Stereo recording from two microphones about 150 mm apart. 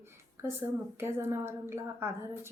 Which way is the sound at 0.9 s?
15° right (ahead or behind).